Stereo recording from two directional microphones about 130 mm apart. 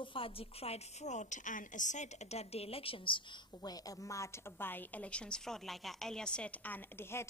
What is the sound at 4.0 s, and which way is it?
A woman's voice, 25° left (ahead or behind).